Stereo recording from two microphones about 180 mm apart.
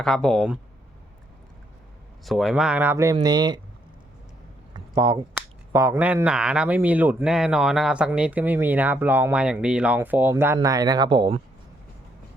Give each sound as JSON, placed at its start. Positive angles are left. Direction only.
{"t": 0.0, "sound": "speech", "side_deg": 5}
{"t": 2.2, "sound": "speech", "side_deg": 0}
{"t": 4.7, "sound": "a sound", "side_deg": -25}
{"t": 5.7, "sound": "speech", "side_deg": -15}